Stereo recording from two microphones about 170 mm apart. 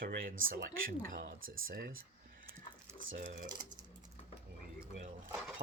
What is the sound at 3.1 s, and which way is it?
Speech, 50° right (ahead or behind).